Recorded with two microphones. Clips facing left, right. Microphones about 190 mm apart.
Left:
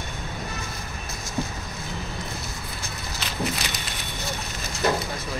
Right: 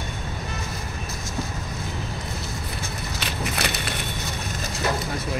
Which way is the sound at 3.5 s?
65° right (ahead or behind).